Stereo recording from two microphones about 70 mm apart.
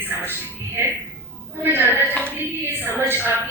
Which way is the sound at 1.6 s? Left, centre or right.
Right.